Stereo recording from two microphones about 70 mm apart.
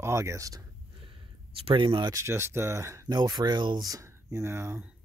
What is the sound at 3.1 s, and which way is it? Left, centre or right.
Speech, right.